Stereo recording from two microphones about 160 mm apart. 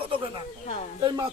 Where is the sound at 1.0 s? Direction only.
25° right (ahead or behind).